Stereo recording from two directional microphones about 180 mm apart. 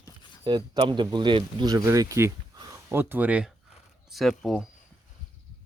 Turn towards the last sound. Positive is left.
turn(degrees=0)  # may be behind; listen again after turning